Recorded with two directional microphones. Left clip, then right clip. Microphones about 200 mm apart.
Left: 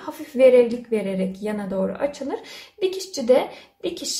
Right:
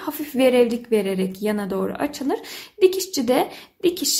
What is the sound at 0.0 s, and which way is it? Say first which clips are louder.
Speech: left 3 dB; 50° right (ahead or behind).